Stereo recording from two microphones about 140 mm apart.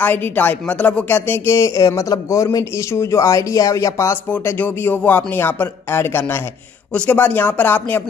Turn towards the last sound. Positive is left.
turn(degrees=15)  # may be behind; listen again after turning